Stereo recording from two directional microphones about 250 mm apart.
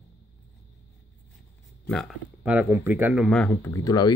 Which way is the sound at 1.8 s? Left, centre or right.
Centre.